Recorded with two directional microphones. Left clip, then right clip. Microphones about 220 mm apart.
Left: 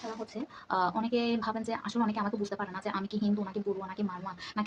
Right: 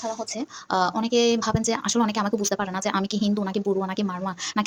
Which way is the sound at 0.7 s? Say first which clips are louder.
Right 7 dB; 30° right (ahead or behind).